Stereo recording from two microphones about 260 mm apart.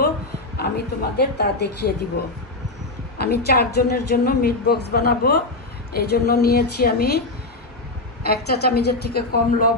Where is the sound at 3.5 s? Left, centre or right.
Left.